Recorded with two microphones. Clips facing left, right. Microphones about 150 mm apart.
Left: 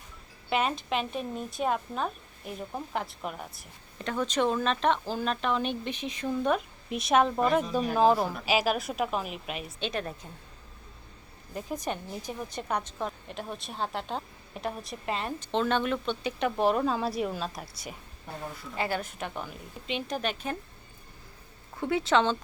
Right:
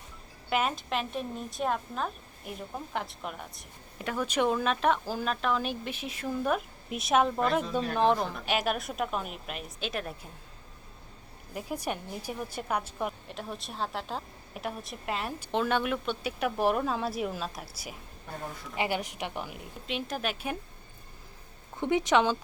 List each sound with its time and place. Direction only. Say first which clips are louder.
0.5 s a woman's voice: left 1 dB; centre (ahead or behind)
7.6 s a woman's voice: left 3 dB; 10° left (ahead or behind)
11.5 s a woman's voice: left 1 dB; 10° right (ahead or behind)
18.8 s a woman's voice: even; 15° right (ahead or behind)
19.9 s a woman's voice: left 2 dB; 5° right (ahead or behind)
21.8 s a woman's voice: even; 20° right (ahead or behind)